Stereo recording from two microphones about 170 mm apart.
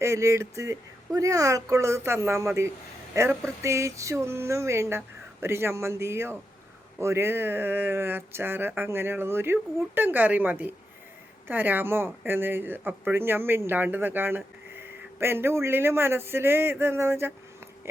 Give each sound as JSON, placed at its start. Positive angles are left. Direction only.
{"t": 0.0, "sound": "speech", "side_deg": -15}